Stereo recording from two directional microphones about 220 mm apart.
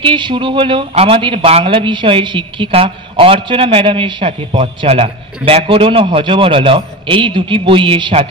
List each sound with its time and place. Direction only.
0.0 s a man's voice: 20° right (ahead or behind)